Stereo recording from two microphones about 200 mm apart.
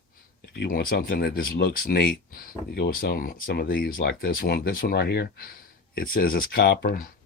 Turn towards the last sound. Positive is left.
turn(degrees=50)  # may be behind; listen again after turning